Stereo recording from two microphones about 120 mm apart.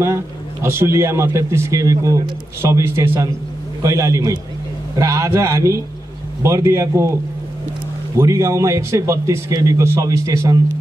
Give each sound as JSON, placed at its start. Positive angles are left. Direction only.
{"t": 0.0, "sound": "a man's voice", "side_deg": -20}
{"t": 8.2, "sound": "a man's voice", "side_deg": -25}